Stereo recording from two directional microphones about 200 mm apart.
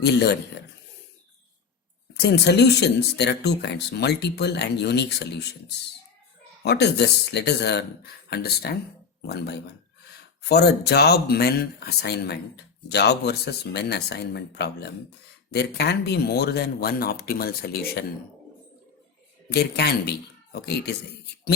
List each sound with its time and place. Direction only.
0.0 s speech: 55° left (ahead or behind)
2.1 s speech: 55° left (ahead or behind)
6.6 s speech: 55° left (ahead or behind)
19.5 s speech: 55° left (ahead or behind)